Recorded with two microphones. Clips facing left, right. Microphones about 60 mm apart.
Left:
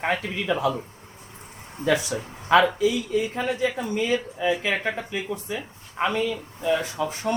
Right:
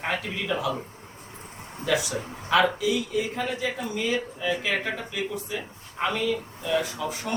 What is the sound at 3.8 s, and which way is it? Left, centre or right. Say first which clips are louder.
Speech: left 3 dB; left.